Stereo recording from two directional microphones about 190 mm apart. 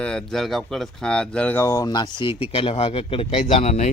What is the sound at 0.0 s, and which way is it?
A man's voice, 5° left (ahead or behind).